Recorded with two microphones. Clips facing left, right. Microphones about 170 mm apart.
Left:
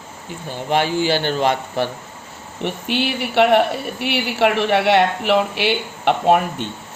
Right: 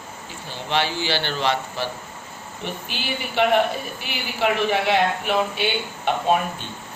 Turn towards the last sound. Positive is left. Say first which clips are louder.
# left 5 dB
turn(degrees=70)  # may be behind; listen again after turning